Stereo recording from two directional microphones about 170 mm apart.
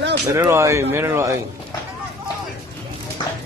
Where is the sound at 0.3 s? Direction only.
20° right (ahead or behind).